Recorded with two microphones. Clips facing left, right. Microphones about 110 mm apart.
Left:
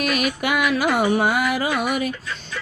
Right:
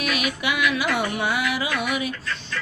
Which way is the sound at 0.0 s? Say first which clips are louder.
Left 3 dB; 45° left (ahead or behind).